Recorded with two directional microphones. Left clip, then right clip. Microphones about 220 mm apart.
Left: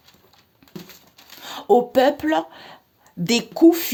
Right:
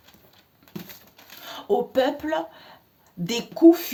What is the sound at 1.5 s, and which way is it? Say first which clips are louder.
Speech: left 7 dB; 50° left (ahead or behind).